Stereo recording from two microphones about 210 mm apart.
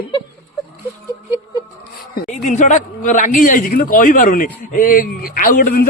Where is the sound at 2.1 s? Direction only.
35° left (ahead or behind).